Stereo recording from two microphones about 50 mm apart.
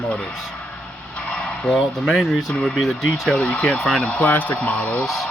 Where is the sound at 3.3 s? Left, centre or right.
Left.